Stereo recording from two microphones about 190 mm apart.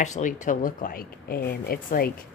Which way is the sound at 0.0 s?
40° left (ahead or behind).